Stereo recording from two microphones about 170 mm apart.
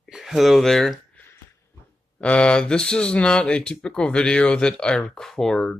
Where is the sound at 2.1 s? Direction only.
5° left (ahead or behind).